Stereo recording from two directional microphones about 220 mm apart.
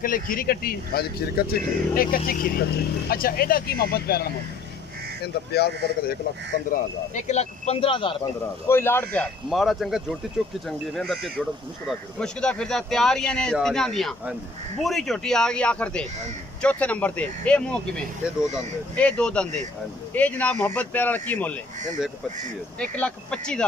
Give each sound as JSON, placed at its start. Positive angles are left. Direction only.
{"t": 0.0, "sound": "speech", "side_deg": 40}
{"t": 8.6, "sound": "speech", "side_deg": 10}
{"t": 22.8, "sound": "speech", "side_deg": 5}